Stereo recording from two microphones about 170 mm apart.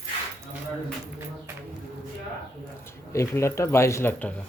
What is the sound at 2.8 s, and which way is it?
Speech, 15° left (ahead or behind).